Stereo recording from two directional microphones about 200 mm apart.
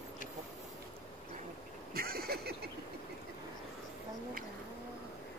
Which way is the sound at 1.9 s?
50° right (ahead or behind).